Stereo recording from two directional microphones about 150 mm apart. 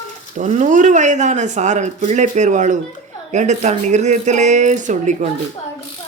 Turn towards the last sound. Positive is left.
turn(degrees=-55)  # may be behind; listen again after turning